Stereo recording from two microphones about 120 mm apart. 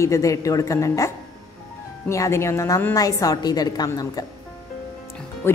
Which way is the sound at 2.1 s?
25° left (ahead or behind).